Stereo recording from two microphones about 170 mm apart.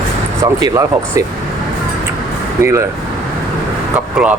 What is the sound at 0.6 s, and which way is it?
Speech, 20° right (ahead or behind).